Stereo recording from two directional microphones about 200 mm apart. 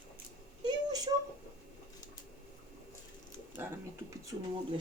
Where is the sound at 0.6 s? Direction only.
20° right (ahead or behind).